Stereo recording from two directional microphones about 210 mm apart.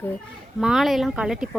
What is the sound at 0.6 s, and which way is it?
Speech, centre (ahead or behind).